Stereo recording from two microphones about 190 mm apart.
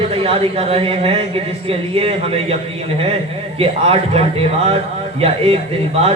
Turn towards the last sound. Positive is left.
turn(degrees=-30)  # may be behind; listen again after turning